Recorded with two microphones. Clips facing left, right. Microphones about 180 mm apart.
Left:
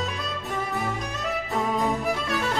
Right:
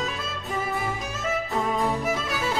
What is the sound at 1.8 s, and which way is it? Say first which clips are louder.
Music: even; centre (ahead or behind).